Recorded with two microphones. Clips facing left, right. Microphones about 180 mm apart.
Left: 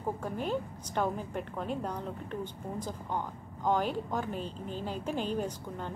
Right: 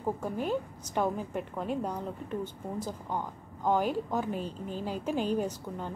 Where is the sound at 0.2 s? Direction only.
10° right (ahead or behind).